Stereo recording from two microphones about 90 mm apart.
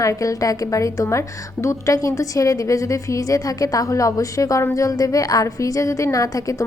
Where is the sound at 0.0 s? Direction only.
40° left (ahead or behind).